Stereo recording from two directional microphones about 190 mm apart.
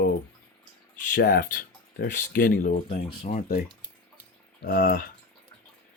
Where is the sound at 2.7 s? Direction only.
30° left (ahead or behind).